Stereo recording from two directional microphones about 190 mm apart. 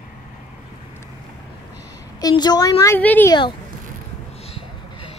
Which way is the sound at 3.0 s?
10° left (ahead or behind).